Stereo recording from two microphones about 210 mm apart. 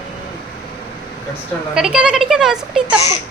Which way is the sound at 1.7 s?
5° right (ahead or behind).